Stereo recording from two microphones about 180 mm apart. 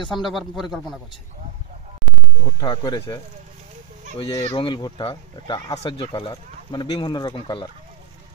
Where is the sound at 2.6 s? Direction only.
25° left (ahead or behind).